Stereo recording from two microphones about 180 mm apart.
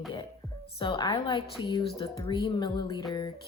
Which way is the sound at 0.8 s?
25° left (ahead or behind).